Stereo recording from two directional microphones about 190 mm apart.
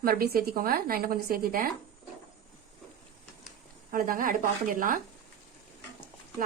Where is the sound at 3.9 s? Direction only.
45° right (ahead or behind).